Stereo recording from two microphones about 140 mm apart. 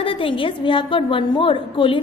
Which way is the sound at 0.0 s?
40° left (ahead or behind).